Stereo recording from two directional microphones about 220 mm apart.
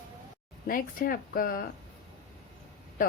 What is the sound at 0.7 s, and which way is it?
Speech, 40° left (ahead or behind).